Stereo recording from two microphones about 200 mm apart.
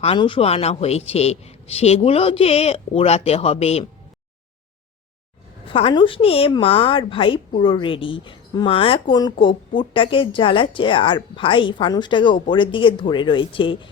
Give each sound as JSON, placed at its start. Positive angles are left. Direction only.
{"t": 0.0, "sound": "a man's voice", "side_deg": 25}
{"t": 5.6, "sound": "speech", "side_deg": 25}